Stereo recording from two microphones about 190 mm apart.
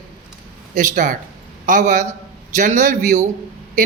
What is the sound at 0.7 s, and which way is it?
A man's voice, 45° right (ahead or behind).